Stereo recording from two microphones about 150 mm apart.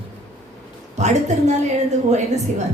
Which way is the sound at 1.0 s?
50° right (ahead or behind).